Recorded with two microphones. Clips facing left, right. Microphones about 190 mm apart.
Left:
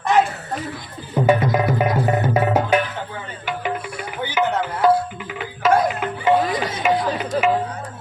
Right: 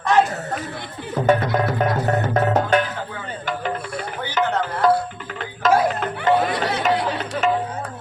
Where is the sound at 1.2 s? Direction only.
10° left (ahead or behind).